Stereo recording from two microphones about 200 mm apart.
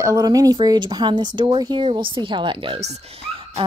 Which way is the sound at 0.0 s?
15° right (ahead or behind).